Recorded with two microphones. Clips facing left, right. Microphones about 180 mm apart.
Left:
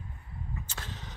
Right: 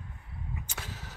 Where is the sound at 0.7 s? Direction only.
10° right (ahead or behind).